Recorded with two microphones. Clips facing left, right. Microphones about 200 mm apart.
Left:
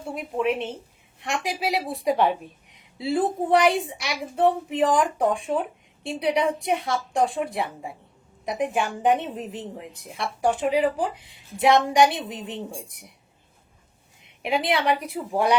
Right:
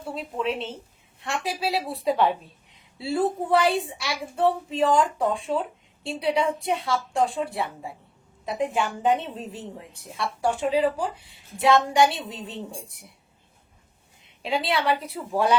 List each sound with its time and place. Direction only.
0.1 s a woman's voice: 15° left (ahead or behind)
14.4 s a woman's voice: 20° left (ahead or behind)